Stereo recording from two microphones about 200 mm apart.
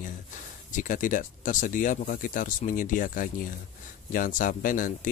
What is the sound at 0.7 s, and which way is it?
Speech, 40° left (ahead or behind).